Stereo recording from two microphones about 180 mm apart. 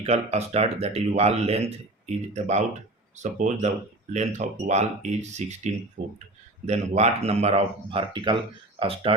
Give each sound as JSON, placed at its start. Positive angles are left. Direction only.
{"t": 0.0, "sound": "speech", "side_deg": -35}